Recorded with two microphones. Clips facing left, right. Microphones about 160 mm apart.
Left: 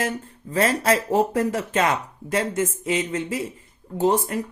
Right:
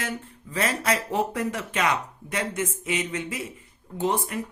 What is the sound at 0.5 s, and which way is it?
Speech, 35° left (ahead or behind).